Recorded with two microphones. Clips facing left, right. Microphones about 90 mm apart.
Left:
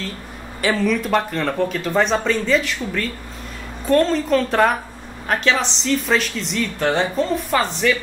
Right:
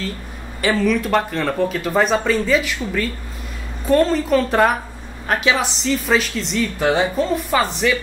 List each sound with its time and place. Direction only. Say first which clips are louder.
0.6 s speech: right 1 dB; centre (ahead or behind)